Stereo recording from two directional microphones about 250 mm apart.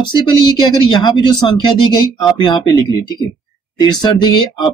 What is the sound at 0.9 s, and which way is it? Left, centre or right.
Speech, centre.